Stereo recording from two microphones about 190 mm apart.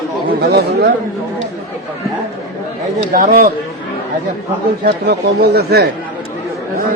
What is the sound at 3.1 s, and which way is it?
Speech, 45° right (ahead or behind).